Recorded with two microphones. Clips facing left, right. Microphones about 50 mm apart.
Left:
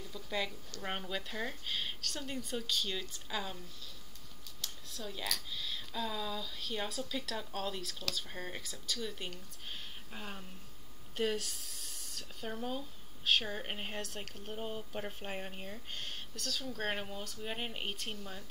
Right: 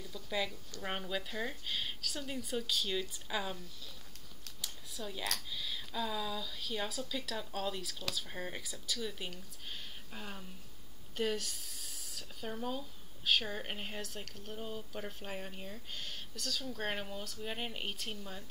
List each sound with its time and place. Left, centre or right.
0.1 s a sound: centre
0.8 s speech: centre
4.6 s a sound: centre
5.5 s speech: centre
10.1 s speech: centre
11.2 s a sound: centre
12.5 s speech: centre
14.6 s speech: left
16.3 s speech: centre